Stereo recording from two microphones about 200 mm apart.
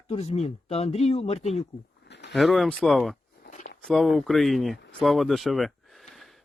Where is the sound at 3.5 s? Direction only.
35° left (ahead or behind).